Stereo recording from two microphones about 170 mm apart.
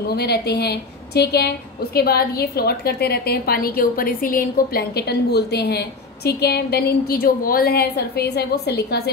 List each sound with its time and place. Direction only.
0.1 s a woman's voice: 70° left (ahead or behind)